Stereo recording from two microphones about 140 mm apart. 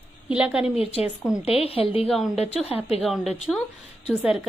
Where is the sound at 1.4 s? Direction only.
45° left (ahead or behind).